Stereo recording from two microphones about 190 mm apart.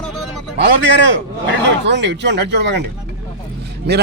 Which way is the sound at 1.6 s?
65° right (ahead or behind).